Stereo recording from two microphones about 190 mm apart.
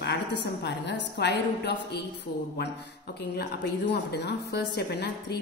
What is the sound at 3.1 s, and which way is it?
A woman's voice, 60° left (ahead or behind).